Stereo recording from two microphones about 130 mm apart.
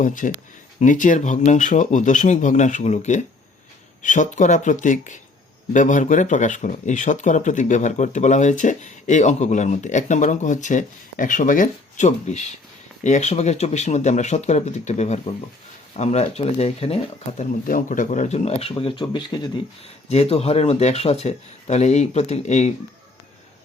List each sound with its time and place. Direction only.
0.0 s speech: 85° left; by 17.4 s 50° left (ahead or behind)
17.7 s speech: 90° left; by 18.7 s 55° left (ahead or behind)
18.8 s speech: 40° left (ahead or behind)
20.1 s speech: 55° left (ahead or behind)